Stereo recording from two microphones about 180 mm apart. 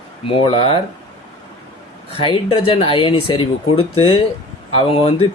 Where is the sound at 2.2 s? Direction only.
30° left (ahead or behind).